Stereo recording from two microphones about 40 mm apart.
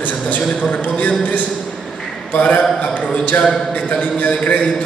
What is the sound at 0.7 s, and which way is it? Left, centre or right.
Speech, left.